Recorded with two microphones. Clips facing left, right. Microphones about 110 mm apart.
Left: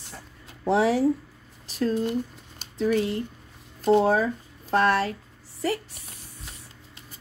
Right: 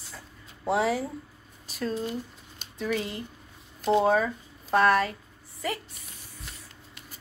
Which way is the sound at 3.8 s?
50° left (ahead or behind).